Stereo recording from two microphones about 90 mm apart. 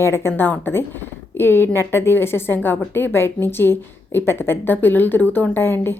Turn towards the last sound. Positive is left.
turn(degrees=25)  # may be behind; listen again after turning